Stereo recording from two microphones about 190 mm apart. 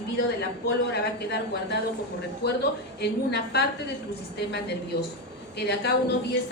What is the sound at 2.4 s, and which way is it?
A woman's voice, 60° left (ahead or behind).